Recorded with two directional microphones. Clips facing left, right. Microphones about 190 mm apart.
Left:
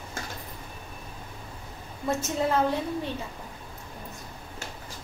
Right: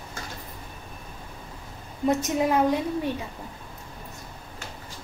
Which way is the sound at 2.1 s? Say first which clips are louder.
Right 3 dB; 15° right (ahead or behind).